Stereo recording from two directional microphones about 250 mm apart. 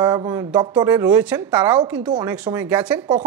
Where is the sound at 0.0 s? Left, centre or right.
Centre.